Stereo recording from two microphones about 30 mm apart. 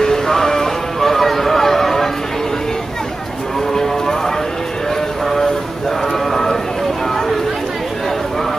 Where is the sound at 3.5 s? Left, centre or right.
Centre.